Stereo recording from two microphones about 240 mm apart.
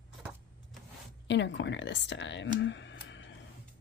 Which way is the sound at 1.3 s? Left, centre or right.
Left.